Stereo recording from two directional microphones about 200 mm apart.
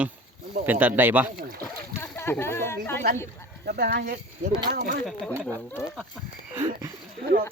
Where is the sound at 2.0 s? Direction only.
10° left (ahead or behind).